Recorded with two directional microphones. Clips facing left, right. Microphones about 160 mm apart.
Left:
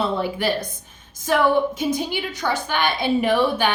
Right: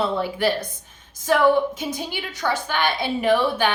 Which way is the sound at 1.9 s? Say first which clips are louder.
Left 5 dB; 15° left (ahead or behind).